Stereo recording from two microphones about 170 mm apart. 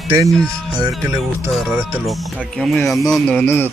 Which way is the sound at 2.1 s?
5° left (ahead or behind).